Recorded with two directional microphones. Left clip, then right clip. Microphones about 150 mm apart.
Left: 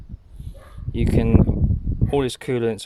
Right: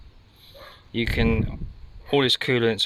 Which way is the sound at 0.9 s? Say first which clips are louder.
Left 3 dB; 20° left (ahead or behind).